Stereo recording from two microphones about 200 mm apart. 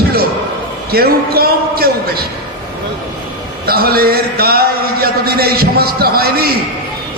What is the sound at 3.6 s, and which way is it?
A man's voice, 50° right (ahead or behind).